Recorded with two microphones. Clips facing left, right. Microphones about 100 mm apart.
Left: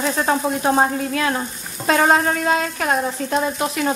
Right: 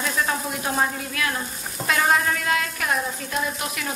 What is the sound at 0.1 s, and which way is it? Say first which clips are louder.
Speech: left 6 dB; 35° left (ahead or behind).